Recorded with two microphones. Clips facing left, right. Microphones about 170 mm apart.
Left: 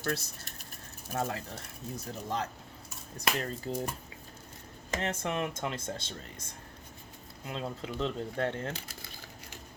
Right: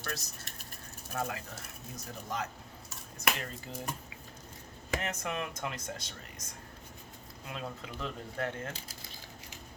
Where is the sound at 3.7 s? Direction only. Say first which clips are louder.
Left 8 dB; 35° left (ahead or behind).